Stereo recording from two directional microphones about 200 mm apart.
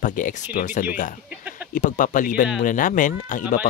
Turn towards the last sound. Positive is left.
turn(degrees=40)  # may be behind; listen again after turning